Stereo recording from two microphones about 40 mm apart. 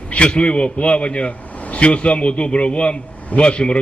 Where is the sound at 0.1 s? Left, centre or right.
Left.